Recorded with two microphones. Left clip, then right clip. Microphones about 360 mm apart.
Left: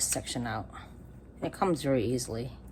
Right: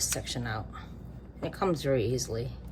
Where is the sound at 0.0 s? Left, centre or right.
Left.